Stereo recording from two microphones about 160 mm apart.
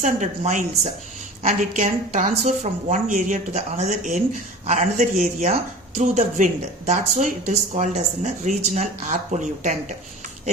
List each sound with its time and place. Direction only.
0.0 s speech: 50° right (ahead or behind)